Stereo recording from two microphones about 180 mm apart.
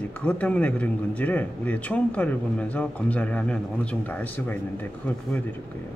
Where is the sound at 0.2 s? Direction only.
5° left (ahead or behind).